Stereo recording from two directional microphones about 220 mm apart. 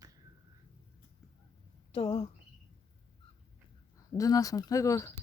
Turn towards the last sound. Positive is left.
turn(degrees=15)  # may be behind; listen again after turning